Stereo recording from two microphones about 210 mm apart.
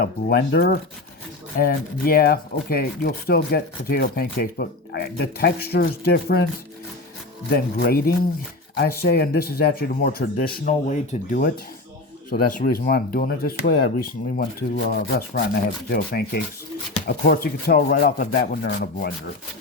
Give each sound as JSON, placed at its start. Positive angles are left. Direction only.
{"t": 0.0, "sound": "speech", "side_deg": 50}
{"t": 7.5, "sound": "speech", "side_deg": 45}